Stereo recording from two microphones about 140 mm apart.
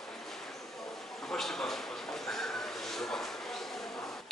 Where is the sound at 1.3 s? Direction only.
5° left (ahead or behind).